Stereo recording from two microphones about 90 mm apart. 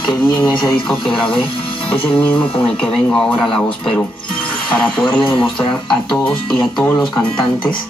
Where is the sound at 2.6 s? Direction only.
10° left (ahead or behind).